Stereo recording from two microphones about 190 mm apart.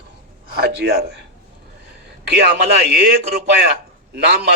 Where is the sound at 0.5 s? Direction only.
55° right (ahead or behind).